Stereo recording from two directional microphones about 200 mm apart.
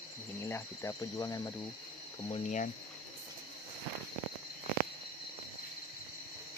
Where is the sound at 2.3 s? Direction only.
40° left (ahead or behind).